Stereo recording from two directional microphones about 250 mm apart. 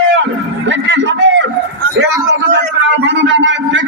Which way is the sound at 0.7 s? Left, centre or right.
Right.